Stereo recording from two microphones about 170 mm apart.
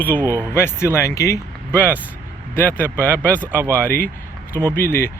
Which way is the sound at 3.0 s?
10° left (ahead or behind).